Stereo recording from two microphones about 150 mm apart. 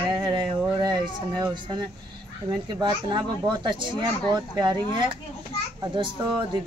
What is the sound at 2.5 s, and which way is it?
Speech, 30° right (ahead or behind).